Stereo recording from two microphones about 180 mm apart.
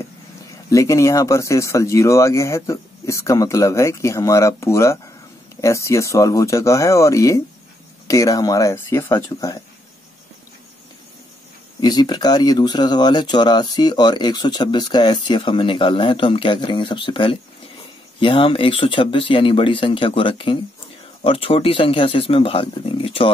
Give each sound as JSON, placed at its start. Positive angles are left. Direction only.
{"t": 0.7, "sound": "speech", "side_deg": 15}
{"t": 11.8, "sound": "speech", "side_deg": 25}